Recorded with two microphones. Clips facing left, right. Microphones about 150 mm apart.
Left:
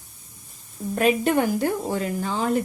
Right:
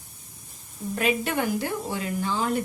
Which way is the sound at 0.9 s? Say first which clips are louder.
Left 6 dB; 45° left (ahead or behind).